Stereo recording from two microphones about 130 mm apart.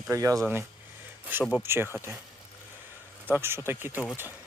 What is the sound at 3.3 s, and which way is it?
Speech, 15° right (ahead or behind).